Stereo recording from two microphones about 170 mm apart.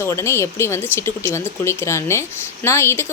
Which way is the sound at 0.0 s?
15° left (ahead or behind).